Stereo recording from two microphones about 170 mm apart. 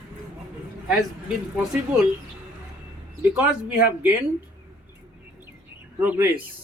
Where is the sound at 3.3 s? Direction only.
5° right (ahead or behind).